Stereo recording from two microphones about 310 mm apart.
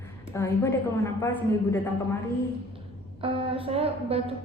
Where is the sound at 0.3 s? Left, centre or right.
Centre.